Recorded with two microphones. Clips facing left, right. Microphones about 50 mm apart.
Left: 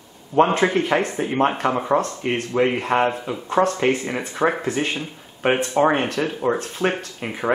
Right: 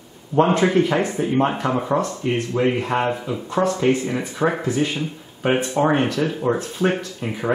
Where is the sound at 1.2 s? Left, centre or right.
Left.